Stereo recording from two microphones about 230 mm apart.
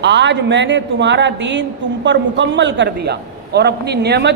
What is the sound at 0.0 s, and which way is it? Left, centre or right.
A man's voice, right.